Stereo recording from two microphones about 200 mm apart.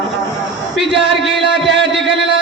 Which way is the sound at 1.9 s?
Centre (ahead or behind).